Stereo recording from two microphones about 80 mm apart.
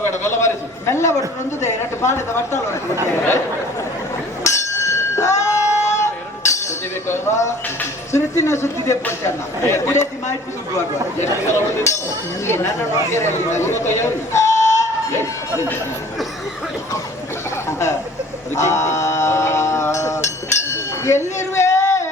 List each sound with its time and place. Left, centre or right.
0.0 s a man's voice: left
4.4 s a sound: left
7.1 s speech: left
17.7 s speech: left
18.5 s music: left
21.5 s a sound: left